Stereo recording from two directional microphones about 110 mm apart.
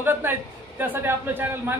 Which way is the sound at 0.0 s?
20° right (ahead or behind).